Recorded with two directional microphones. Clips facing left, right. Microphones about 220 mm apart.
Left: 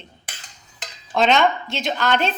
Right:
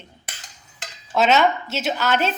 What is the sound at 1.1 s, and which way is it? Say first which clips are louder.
A woman's voice: even; 5° right (ahead or behind).